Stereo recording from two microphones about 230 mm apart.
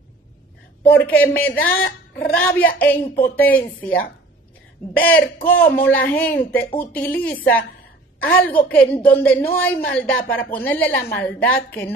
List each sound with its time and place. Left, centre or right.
0.8 s a woman's voice: centre